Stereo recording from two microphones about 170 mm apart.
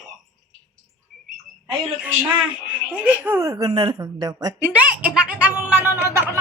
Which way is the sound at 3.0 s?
10° right (ahead or behind).